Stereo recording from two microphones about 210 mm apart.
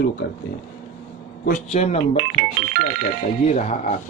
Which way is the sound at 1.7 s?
30° left (ahead or behind).